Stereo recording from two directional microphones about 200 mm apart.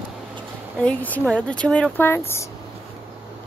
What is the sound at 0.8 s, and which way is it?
Speech, 5° left (ahead or behind).